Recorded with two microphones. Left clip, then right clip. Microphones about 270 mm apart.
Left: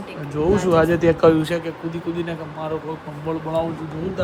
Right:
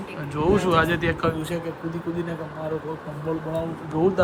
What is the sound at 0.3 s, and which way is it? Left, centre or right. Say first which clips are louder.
Speech: left 3 dB; centre.